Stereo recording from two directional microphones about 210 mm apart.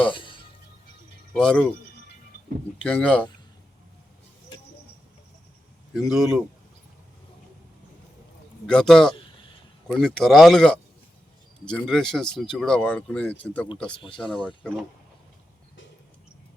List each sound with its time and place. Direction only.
0.0 s music: 25° left (ahead or behind)
1.3 s speech: 5° left (ahead or behind)
2.8 s speech: 5° left (ahead or behind)
5.9 s speech: centre (ahead or behind)
8.6 s speech: centre (ahead or behind)
13.9 s speech: 25° left (ahead or behind)
14.2 s speech: centre (ahead or behind)